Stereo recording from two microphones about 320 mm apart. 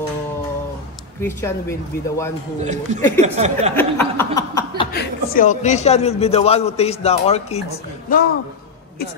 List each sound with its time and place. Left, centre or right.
1.2 s speech: centre
2.6 s speech: right
3.7 s chuckle: centre
4.9 s a man's voice: left